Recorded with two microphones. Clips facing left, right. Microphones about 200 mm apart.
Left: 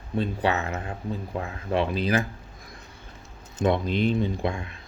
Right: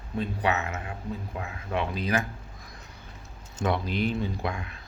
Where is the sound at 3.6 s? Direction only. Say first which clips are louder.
Left 4 dB; 20° left (ahead or behind).